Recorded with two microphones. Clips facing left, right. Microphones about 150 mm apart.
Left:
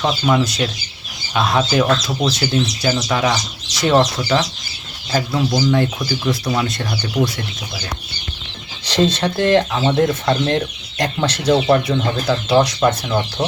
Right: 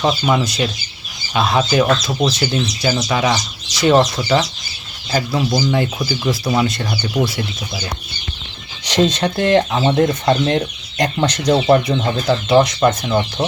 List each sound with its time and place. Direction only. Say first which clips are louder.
0.0 s speech: even; 5° right (ahead or behind)
8.8 s speech: right 1 dB; 15° right (ahead or behind); by 11.5 s 5° left (ahead or behind)
11.5 s speech: right 1 dB; 10° right (ahead or behind)